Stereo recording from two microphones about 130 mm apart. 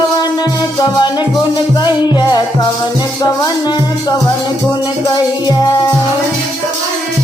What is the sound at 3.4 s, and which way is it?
Music, 30° left (ahead or behind).